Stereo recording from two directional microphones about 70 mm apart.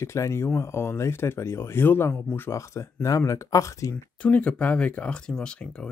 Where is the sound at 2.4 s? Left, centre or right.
Left.